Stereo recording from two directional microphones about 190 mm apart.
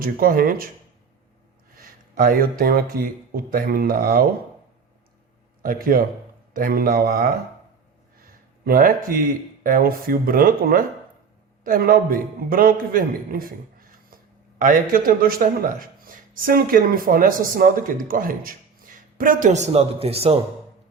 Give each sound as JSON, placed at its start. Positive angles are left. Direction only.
{"t": 0.0, "sound": "a man's voice", "side_deg": -50}
{"t": 1.7, "sound": "speech", "side_deg": -50}
{"t": 5.6, "sound": "a man's voice", "side_deg": -50}
{"t": 8.2, "sound": "a sound", "side_deg": -50}
{"t": 9.6, "sound": "a man's voice", "side_deg": -50}